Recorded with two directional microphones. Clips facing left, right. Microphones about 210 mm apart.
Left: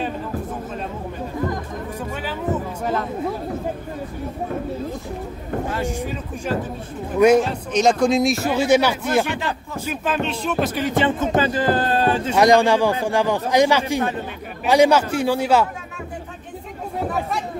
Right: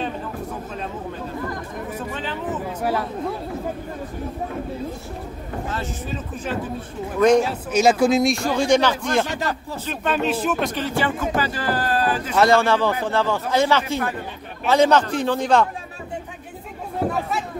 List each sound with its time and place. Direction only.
2.2 s music: 10° left (ahead or behind)
2.8 s a sound: 10° right (ahead or behind)
5.7 s a man's voice: 15° left (ahead or behind)
7.2 s a man's voice: 10° left (ahead or behind)
7.4 s a man's voice: 5° right (ahead or behind)
10.7 s speech: 15° left (ahead or behind)
12.4 s a man's voice: 15° left (ahead or behind)